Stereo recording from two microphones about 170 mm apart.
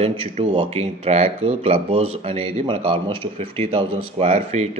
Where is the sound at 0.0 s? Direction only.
40° right (ahead or behind).